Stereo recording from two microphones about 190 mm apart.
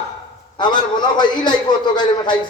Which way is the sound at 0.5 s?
25° left (ahead or behind).